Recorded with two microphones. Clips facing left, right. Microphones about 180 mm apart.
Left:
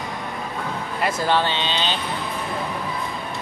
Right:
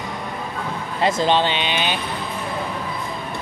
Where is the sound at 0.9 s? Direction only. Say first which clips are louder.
Right 3 dB; 25° right (ahead or behind).